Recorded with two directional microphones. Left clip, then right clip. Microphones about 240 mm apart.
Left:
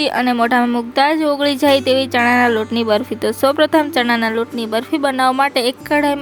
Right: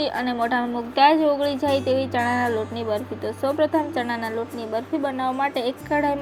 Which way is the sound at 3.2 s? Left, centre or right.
Left.